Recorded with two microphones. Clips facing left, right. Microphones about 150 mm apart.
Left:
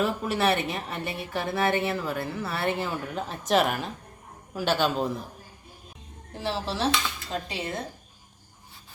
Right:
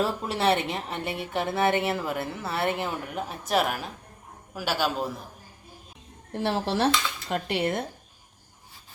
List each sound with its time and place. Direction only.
0.0 s a woman's voice: 25° right (ahead or behind)
3.2 s a woman's voice: 10° right (ahead or behind)
6.3 s speech: 60° right (ahead or behind)